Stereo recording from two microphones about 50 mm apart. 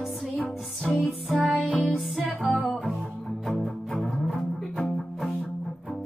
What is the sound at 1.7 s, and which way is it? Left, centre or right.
Music, left.